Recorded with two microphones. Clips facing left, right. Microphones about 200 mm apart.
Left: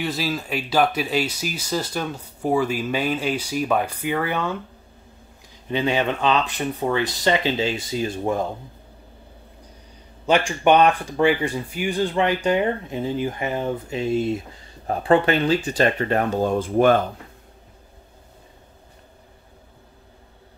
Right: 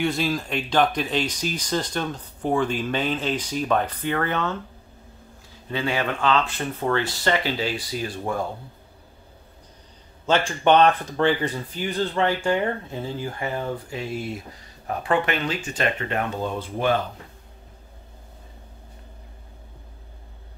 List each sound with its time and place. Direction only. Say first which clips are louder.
0.0 s speech: right 2 dB; 5° left (ahead or behind)
5.7 s speech: left 4 dB; 20° left (ahead or behind)
10.2 s speech: left 2 dB; 15° left (ahead or behind); by 17.0 s 50° left (ahead or behind)